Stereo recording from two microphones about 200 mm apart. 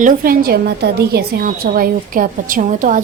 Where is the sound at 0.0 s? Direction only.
50° right (ahead or behind).